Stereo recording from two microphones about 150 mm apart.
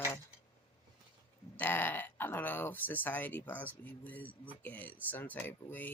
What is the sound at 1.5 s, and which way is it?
Speech, 10° left (ahead or behind).